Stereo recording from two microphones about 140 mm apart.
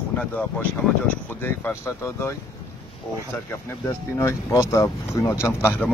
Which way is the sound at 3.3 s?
15° left (ahead or behind).